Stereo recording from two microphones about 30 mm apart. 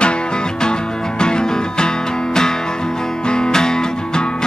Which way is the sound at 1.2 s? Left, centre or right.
Left.